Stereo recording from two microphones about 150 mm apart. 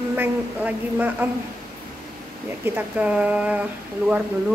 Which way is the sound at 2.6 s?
10° right (ahead or behind).